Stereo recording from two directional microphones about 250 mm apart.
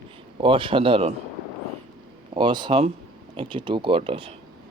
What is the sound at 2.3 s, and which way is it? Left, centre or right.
Speech, centre.